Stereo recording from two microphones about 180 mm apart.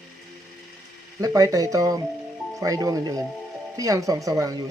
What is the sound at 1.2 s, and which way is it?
Speech, 20° right (ahead or behind).